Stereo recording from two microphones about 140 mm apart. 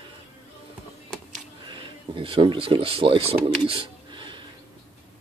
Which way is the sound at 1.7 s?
35° right (ahead or behind).